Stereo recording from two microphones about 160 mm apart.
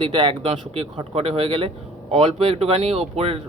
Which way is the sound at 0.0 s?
30° right (ahead or behind).